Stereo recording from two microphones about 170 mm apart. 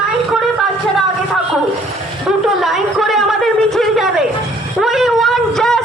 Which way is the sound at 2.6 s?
Centre (ahead or behind).